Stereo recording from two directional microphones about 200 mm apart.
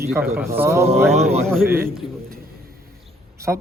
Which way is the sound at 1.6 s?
10° right (ahead or behind).